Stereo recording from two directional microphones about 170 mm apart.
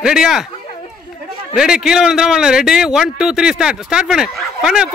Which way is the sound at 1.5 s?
5° right (ahead or behind).